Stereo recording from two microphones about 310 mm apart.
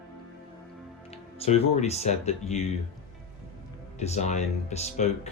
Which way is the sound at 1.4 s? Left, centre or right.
Centre.